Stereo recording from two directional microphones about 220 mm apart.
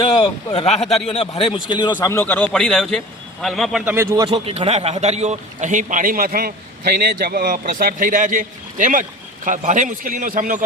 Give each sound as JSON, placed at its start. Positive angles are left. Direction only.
{"t": 0.2, "sound": "a man's voice", "side_deg": 25}
{"t": 3.9, "sound": "speech", "side_deg": -15}
{"t": 4.3, "sound": "a man's voice", "side_deg": -25}